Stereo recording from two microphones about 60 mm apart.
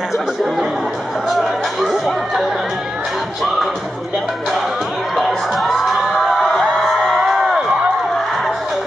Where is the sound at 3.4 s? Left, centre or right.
Centre.